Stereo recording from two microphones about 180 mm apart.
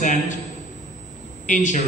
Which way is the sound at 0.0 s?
45° left (ahead or behind).